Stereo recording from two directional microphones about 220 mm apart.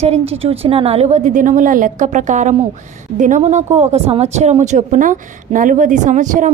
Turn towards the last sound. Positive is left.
turn(degrees=-35)  # may be behind; listen again after turning